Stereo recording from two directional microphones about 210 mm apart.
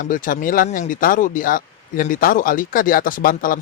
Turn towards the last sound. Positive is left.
turn(degrees=40)  # may be behind; listen again after turning